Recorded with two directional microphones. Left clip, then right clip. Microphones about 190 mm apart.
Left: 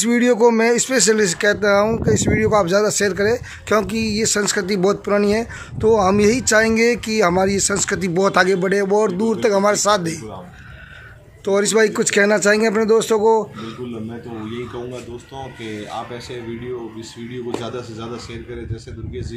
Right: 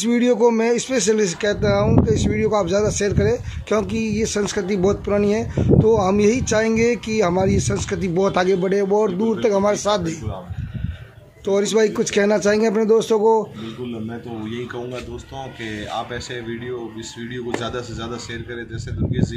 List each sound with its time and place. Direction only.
0.0 s speech: centre (ahead or behind)
11.4 s speech: centre (ahead or behind)
17.6 s speech: 30° right (ahead or behind)